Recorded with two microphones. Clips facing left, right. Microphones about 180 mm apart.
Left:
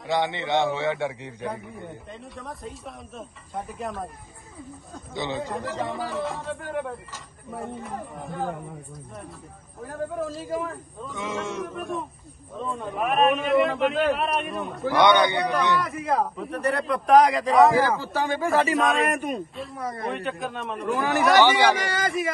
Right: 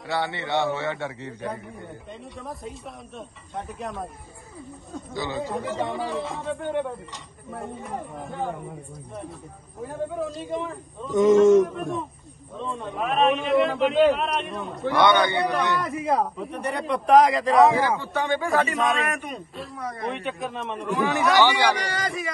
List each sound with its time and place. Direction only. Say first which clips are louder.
0.1 s a man's voice: left 2 dB; 15° left (ahead or behind)
2.3 s a man's voice: right 2 dB; centre (ahead or behind)
5.1 s speech: even; 20° left (ahead or behind)
5.4 s a man's voice: right 2 dB; centre (ahead or behind)
10.1 s a man's voice: even; centre (ahead or behind)
11.1 s a man's voice: right 16 dB; 45° right (ahead or behind)
11.6 s a man's voice: right 3 dB; centre (ahead or behind)
15.0 s a man's voice: left 1 dB; 20° left (ahead or behind)
15.5 s a man's voice: left 1 dB; centre (ahead or behind)
21.4 s a man's voice: left 2 dB; 15° left (ahead or behind)